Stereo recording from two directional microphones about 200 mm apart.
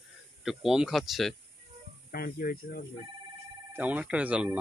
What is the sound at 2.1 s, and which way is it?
Speech, 50° left (ahead or behind).